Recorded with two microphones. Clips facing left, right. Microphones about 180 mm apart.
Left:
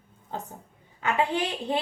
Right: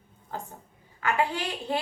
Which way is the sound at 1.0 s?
20° left (ahead or behind).